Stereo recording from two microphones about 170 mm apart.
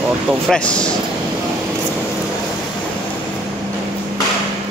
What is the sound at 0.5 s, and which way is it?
Speech, 5° left (ahead or behind).